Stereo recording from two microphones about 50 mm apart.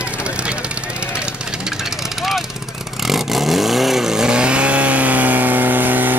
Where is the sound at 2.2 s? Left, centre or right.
Centre.